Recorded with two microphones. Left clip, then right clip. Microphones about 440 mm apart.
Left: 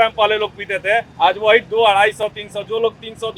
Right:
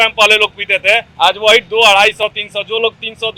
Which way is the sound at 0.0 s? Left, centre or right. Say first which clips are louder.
Right 6 dB; right.